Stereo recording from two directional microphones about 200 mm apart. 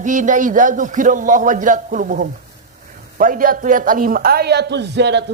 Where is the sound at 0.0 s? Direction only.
40° right (ahead or behind).